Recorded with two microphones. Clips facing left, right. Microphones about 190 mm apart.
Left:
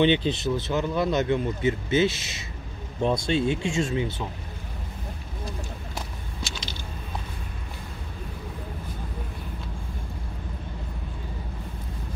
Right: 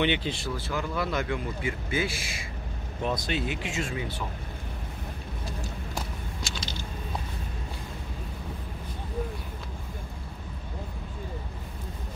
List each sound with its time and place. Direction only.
0.0 s speech: 20° left (ahead or behind)